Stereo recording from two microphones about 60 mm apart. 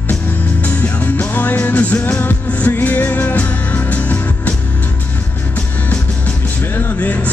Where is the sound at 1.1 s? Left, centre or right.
Left.